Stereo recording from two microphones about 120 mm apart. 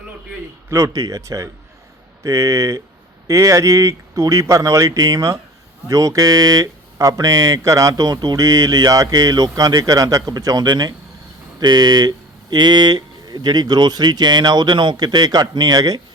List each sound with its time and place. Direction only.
0.7 s speech: 25° right (ahead or behind)